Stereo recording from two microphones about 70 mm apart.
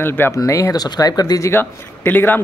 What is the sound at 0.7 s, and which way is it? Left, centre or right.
Speech, left.